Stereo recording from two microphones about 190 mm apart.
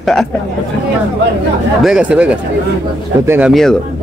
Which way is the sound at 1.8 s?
5° right (ahead or behind).